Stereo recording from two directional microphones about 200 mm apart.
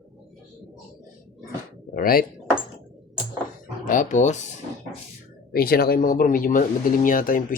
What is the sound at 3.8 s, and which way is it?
Speech, 40° left (ahead or behind).